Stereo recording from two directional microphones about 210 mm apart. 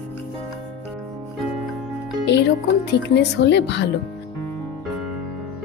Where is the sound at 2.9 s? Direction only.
55° left (ahead or behind).